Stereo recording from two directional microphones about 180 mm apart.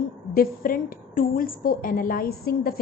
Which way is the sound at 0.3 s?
50° left (ahead or behind).